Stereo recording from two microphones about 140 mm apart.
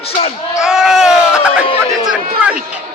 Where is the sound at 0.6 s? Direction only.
5° right (ahead or behind).